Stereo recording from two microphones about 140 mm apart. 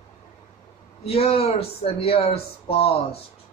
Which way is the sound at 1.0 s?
45° left (ahead or behind).